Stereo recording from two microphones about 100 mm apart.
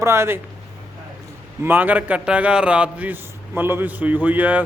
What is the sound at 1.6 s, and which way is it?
A man's voice, 20° right (ahead or behind).